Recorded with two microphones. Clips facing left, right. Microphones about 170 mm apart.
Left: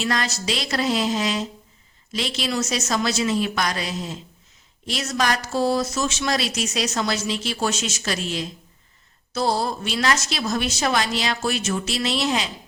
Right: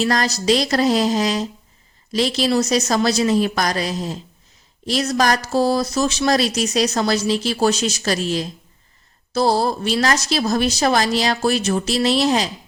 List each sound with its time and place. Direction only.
0.0 s speech: 40° right (ahead or behind)